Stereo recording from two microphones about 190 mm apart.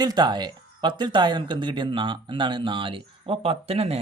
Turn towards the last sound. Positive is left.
turn(degrees=-30)  # may be behind; listen again after turning